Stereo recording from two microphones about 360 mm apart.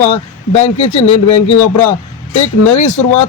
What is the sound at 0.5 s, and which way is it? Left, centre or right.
Speech, centre.